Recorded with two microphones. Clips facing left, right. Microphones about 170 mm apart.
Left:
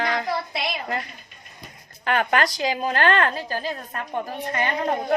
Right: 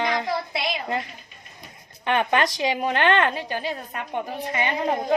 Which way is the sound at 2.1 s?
25° right (ahead or behind).